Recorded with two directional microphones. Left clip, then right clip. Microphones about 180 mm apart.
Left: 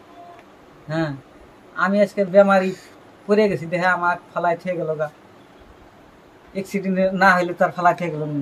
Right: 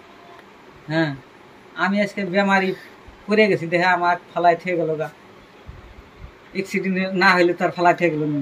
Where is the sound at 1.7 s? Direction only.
15° left (ahead or behind).